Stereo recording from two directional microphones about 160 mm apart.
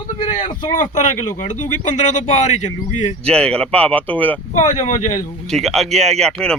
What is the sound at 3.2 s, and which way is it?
Speech, 5° left (ahead or behind).